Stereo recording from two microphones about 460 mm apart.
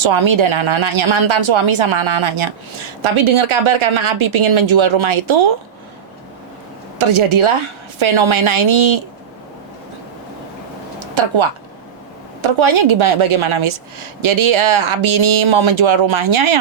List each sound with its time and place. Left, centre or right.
0.0 s speech: right
7.0 s speech: right
11.1 s speech: right